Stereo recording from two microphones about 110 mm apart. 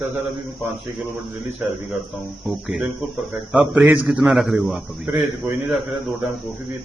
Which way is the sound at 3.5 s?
5° right (ahead or behind).